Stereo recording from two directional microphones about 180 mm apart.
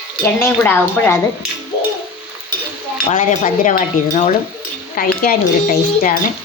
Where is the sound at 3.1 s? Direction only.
45° left (ahead or behind).